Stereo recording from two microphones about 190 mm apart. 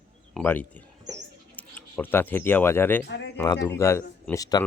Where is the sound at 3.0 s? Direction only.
65° left (ahead or behind).